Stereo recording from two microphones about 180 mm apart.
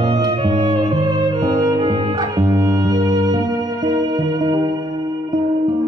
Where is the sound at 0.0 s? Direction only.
20° right (ahead or behind).